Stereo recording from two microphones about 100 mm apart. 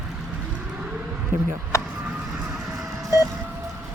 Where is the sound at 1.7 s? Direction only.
30° left (ahead or behind).